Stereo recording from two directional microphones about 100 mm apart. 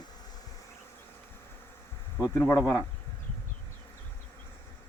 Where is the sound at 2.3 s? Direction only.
30° left (ahead or behind).